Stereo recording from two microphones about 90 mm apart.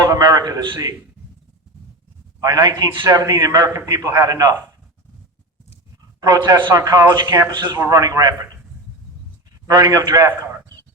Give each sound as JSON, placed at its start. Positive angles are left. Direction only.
{"t": 0.1, "sound": "a sound", "side_deg": -45}
{"t": 2.4, "sound": "a man's voice", "side_deg": -45}
{"t": 6.1, "sound": "a man's voice", "side_deg": -45}
{"t": 7.9, "sound": "a man's voice", "side_deg": -40}
{"t": 9.6, "sound": "a man's voice", "side_deg": -40}